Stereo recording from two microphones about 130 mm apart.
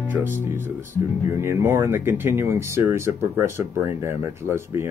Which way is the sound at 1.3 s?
20° right (ahead or behind).